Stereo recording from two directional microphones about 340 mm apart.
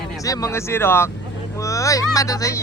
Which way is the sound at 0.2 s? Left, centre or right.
Centre.